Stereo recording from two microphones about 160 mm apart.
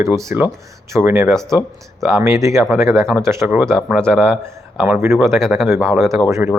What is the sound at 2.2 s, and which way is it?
Speech, 20° right (ahead or behind).